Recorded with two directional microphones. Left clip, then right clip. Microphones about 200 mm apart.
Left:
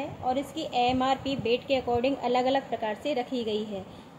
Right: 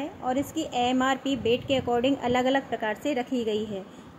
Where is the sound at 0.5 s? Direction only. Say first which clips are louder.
Right 1 dB; 40° right (ahead or behind).